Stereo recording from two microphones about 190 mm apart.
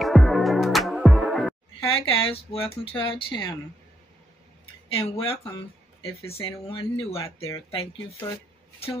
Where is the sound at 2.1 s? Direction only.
30° left (ahead or behind).